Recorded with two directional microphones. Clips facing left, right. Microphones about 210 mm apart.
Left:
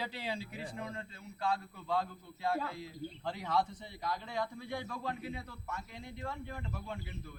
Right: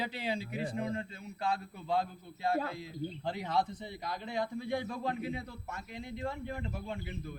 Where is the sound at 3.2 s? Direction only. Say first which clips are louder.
Even; 20° right (ahead or behind).